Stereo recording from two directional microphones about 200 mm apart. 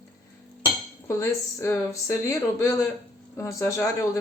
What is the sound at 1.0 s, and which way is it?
Speech, 15° left (ahead or behind).